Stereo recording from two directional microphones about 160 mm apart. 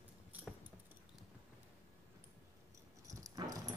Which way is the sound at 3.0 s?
20° right (ahead or behind).